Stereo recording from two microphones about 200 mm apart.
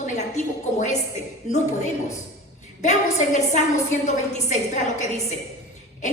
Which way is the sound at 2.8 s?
35° left (ahead or behind).